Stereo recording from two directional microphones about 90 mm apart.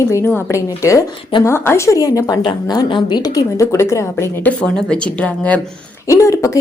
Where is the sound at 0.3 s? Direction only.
35° left (ahead or behind).